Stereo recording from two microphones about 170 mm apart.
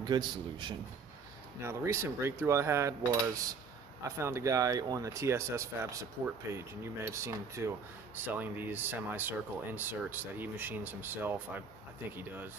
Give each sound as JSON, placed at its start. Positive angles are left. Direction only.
{"t": 0.0, "sound": "a man's voice", "side_deg": -25}
{"t": 1.6, "sound": "speech", "side_deg": -15}